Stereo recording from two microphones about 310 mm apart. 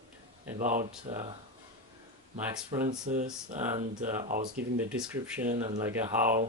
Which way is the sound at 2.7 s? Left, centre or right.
Centre.